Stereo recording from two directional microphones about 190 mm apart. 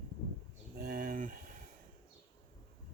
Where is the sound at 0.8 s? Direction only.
45° right (ahead or behind).